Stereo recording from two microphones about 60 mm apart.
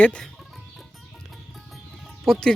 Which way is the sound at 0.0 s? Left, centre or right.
Centre.